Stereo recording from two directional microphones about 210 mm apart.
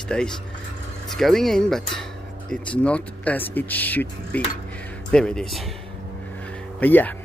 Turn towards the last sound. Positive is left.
turn(degrees=10)  # may be behind; listen again after turning